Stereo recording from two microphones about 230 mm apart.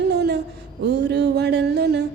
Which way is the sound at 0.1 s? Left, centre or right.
Right.